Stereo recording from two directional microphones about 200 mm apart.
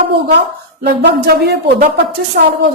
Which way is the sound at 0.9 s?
50° right (ahead or behind).